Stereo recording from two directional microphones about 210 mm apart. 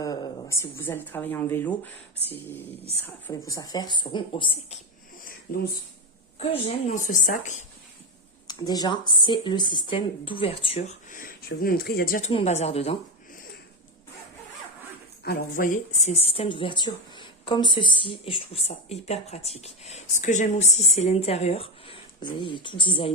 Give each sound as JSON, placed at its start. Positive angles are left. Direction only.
{"t": 0.0, "sound": "speech", "side_deg": 15}
{"t": 3.2, "sound": "speech", "side_deg": 15}
{"t": 5.2, "sound": "a sound", "side_deg": 45}
{"t": 6.4, "sound": "a woman's voice", "side_deg": 30}
{"t": 8.4, "sound": "speech", "side_deg": 20}
{"t": 12.3, "sound": "speech", "side_deg": 30}
{"t": 15.2, "sound": "speech", "side_deg": 45}